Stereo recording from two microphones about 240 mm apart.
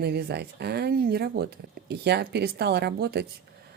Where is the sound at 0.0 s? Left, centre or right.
Right.